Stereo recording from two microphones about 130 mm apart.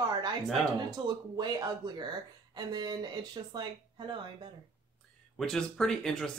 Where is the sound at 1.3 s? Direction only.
35° right (ahead or behind).